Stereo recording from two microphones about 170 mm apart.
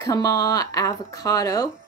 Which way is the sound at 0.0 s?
20° left (ahead or behind).